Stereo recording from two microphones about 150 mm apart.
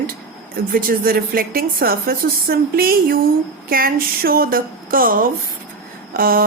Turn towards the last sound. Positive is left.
turn(degrees=-75)  # may be behind; listen again after turning